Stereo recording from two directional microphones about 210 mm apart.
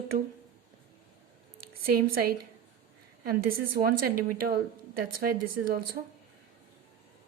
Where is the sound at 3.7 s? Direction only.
45° right (ahead or behind).